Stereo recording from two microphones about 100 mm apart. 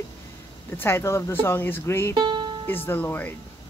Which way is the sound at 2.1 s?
55° right (ahead or behind).